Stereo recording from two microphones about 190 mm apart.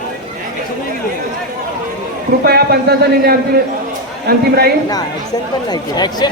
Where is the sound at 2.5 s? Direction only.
55° right (ahead or behind).